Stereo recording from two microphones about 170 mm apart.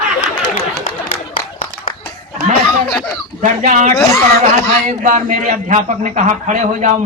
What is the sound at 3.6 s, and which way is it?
A man's voice, 50° right (ahead or behind).